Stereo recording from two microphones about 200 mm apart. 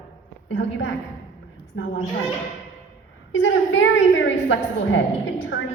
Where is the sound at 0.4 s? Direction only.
65° left (ahead or behind).